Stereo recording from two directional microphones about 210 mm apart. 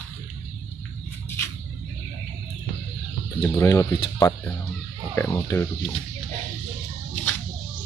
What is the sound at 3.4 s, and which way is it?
Speech, 15° left (ahead or behind).